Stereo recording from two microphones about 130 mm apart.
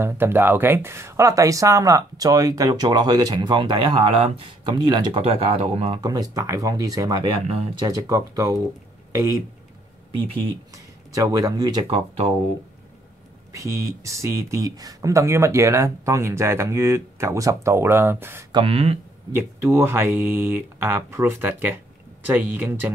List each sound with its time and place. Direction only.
0.0 s speech: 15° right (ahead or behind); by 5.2 s 35° right (ahead or behind)
5.2 s speech: 50° right (ahead or behind)
5.9 s speech: 30° right (ahead or behind)
7.2 s speech: 45° right (ahead or behind)
7.8 s speech: 25° right (ahead or behind)
10.7 s speech: 25° right (ahead or behind)
13.5 s speech: 25° right (ahead or behind)
18.5 s speech: 45° right (ahead or behind)
19.3 s speech: 20° right (ahead or behind)